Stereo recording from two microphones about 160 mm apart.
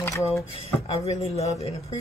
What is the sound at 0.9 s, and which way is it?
Speech, 40° left (ahead or behind).